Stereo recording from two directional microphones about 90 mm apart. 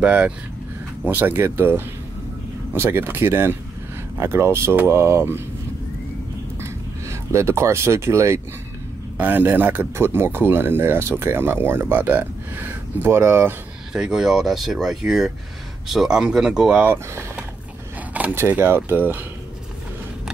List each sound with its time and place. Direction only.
0.0 s speech: 10° right (ahead or behind); by 5.4 s 25° right (ahead or behind)
6.6 s a sound: 30° right (ahead or behind)
9.2 s speech: 20° right (ahead or behind)
13.9 s speech: 5° right (ahead or behind)
16.8 s speech: 20° right (ahead or behind)